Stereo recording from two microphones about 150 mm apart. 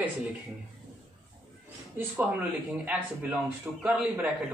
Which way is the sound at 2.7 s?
10° right (ahead or behind).